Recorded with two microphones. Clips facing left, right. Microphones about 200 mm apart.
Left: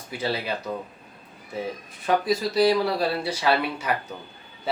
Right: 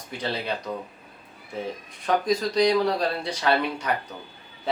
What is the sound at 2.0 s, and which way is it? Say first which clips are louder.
Speech: even; 5° left (ahead or behind).